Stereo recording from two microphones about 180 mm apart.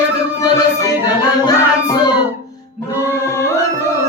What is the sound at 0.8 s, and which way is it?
Music, 20° left (ahead or behind).